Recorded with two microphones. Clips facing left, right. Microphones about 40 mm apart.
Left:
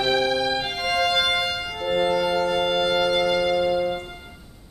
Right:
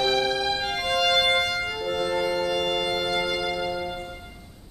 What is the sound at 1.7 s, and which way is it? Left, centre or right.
Brass instrument, left.